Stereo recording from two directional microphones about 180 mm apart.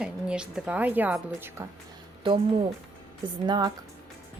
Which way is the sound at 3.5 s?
25° right (ahead or behind).